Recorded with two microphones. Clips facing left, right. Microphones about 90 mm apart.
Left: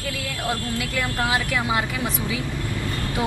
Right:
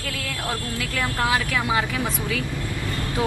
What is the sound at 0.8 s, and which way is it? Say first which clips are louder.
Speech: even; 10° left (ahead or behind).